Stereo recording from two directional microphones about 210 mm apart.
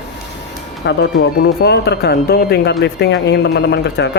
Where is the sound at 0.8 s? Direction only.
55° left (ahead or behind).